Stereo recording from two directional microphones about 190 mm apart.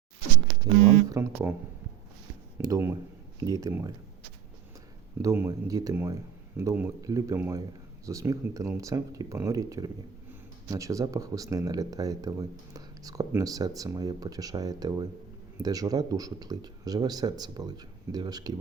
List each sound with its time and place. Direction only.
1.1 s speech: 15° right (ahead or behind)
2.6 s speech: 15° right (ahead or behind)
5.2 s speech: 15° right (ahead or behind)